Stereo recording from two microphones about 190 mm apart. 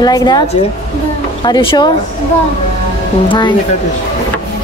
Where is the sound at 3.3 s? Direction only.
25° left (ahead or behind).